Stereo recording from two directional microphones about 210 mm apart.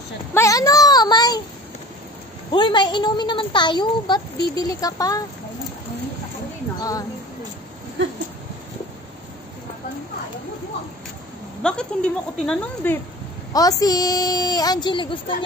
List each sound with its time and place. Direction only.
0.3 s a sound: 15° left (ahead or behind)
2.5 s a child's voice: 20° left (ahead or behind)
6.8 s speech: 15° left (ahead or behind)
11.6 s speech: 5° left (ahead or behind)
13.5 s a woman's voice: 15° left (ahead or behind)